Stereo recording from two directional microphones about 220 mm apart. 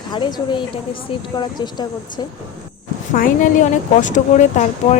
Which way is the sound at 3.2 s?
35° left (ahead or behind).